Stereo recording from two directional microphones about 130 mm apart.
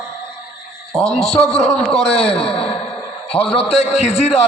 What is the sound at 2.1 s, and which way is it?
Speech, 50° left (ahead or behind).